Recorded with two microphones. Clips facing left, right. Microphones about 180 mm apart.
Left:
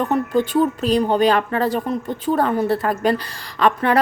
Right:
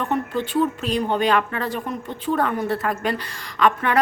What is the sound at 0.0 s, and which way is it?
Speech, 40° left (ahead or behind).